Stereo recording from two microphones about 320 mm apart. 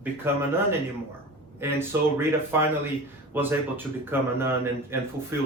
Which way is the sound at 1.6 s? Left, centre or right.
Centre.